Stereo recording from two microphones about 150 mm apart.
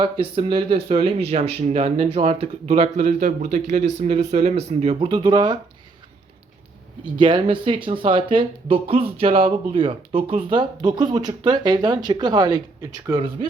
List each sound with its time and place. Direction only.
0.0 s speech: 35° right (ahead or behind)
7.0 s speech: 35° right (ahead or behind)